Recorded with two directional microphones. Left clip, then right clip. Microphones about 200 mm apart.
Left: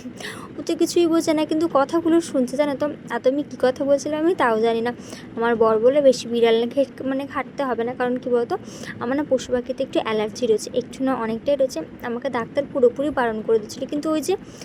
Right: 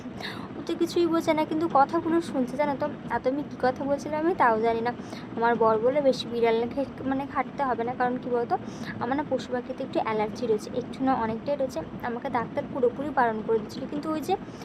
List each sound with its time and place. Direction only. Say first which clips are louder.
0.7 s speech: left 6 dB; 30° left (ahead or behind)